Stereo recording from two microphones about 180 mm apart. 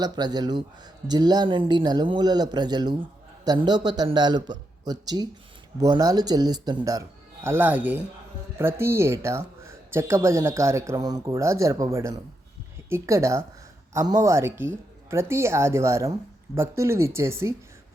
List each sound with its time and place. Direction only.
0.0 s speech: 20° right (ahead or behind)
7.4 s speech: 10° right (ahead or behind)